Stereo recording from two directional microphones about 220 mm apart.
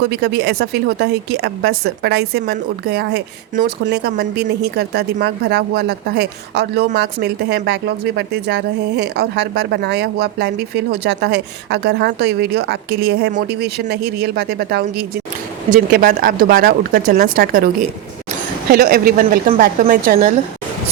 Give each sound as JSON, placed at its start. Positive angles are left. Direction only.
{"t": 0.0, "sound": "speech", "side_deg": -50}
{"t": 18.7, "sound": "speech", "side_deg": -45}